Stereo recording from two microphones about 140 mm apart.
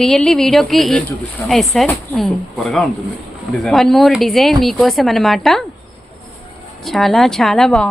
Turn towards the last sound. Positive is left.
turn(degrees=5)  # may be behind; listen again after turning